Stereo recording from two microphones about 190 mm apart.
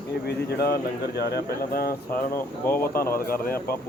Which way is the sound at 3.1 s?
50° left (ahead or behind).